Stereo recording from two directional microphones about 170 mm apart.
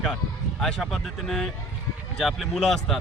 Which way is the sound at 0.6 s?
Centre (ahead or behind).